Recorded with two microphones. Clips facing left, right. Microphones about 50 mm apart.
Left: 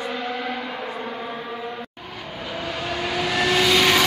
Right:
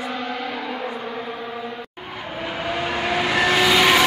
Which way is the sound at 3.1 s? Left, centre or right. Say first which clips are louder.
Right 2 dB; right.